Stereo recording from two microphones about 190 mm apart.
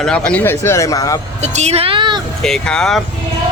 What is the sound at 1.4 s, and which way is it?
Speech, 35° right (ahead or behind).